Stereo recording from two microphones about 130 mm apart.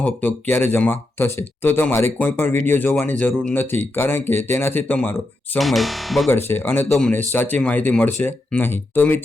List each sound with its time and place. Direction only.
0.0 s speech: 10° left (ahead or behind)
5.5 s speech: centre (ahead or behind)
6.2 s speech: 15° left (ahead or behind)